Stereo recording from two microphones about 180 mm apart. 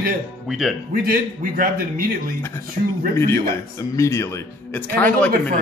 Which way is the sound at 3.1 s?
15° left (ahead or behind).